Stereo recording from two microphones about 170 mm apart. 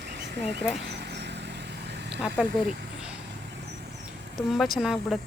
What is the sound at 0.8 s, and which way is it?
Vehicle, 90° right.